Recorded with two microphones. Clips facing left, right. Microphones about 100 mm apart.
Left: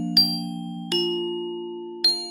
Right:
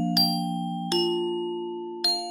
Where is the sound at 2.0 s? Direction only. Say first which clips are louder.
Right 2 dB; 35° right (ahead or behind).